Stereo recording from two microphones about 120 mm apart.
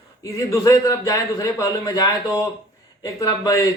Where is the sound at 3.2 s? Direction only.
25° left (ahead or behind).